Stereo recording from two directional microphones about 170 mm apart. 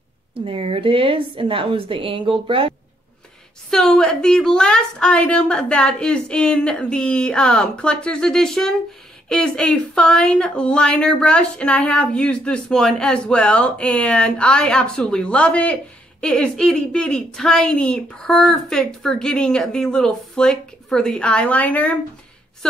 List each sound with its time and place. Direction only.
0.5 s a woman's voice: 35° right (ahead or behind)
3.7 s speech: 5° left (ahead or behind)